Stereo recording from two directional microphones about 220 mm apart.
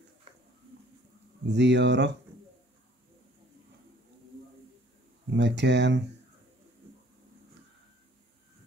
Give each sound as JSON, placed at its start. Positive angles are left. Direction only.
{"t": 1.5, "sound": "speech", "side_deg": -50}
{"t": 5.3, "sound": "speech", "side_deg": -50}